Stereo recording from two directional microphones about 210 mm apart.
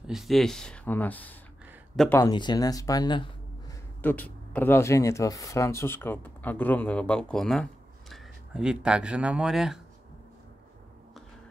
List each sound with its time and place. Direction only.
0.0 s speech: centre (ahead or behind); by 3.3 s 20° left (ahead or behind)
4.0 s speech: 10° left (ahead or behind)